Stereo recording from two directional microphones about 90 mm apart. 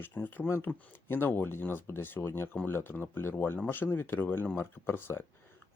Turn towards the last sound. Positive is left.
turn(degrees=25)  # may be behind; listen again after turning